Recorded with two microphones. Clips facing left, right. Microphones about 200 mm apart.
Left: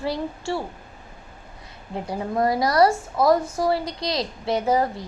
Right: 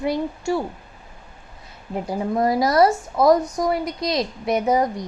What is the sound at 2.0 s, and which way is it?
A woman's voice, 25° right (ahead or behind).